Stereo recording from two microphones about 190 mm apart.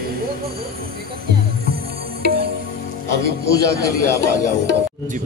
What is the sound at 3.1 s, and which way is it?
Music, 55° right (ahead or behind).